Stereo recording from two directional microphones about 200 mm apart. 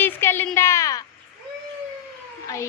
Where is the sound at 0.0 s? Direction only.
10° left (ahead or behind).